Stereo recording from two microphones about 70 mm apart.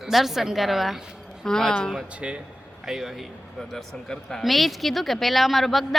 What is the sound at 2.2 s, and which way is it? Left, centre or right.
Speech, centre.